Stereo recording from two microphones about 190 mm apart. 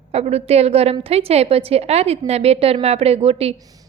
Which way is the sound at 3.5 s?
20° right (ahead or behind).